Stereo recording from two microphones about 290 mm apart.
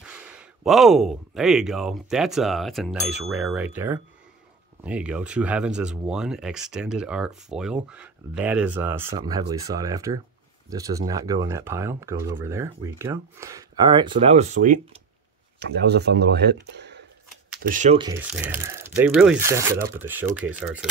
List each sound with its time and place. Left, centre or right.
0.0 s speech: centre
18.4 s speech: centre